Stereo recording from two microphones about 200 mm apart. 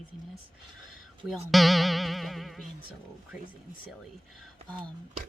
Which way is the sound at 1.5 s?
Centre (ahead or behind).